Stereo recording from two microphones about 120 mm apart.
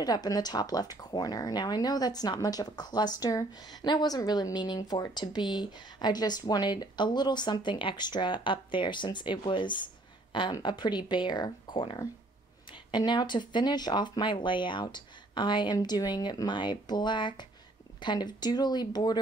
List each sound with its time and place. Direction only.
0.0 s speech: 35° left (ahead or behind)